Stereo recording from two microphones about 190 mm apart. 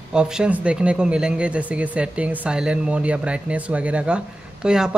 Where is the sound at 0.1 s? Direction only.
5° right (ahead or behind).